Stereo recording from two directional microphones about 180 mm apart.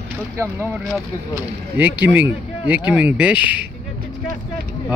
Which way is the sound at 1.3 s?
10° right (ahead or behind).